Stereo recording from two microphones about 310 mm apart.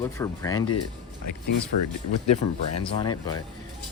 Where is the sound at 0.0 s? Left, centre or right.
Centre.